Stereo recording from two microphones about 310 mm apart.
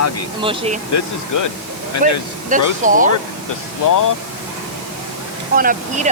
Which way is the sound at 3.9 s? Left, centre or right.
Left.